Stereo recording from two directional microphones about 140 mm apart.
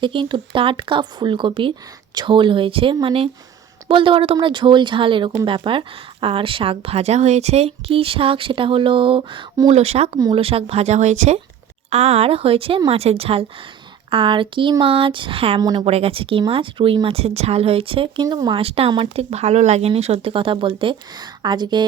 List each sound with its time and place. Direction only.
0.0 s a woman's voice: 35° right (ahead or behind)
9.6 s a woman's voice: 50° right (ahead or behind); by 18.6 s 30° right (ahead or behind)
18.6 s a woman's voice: 45° right (ahead or behind)